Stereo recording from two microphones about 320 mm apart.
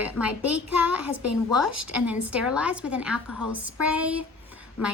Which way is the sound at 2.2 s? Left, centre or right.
Centre.